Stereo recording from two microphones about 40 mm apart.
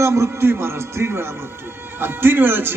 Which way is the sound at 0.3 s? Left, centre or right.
Right.